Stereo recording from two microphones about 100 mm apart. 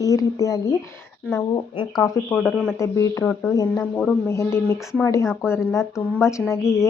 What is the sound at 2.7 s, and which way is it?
Speech, 30° left (ahead or behind).